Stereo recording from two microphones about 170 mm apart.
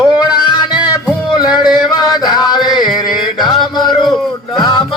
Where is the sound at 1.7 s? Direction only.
25° left (ahead or behind).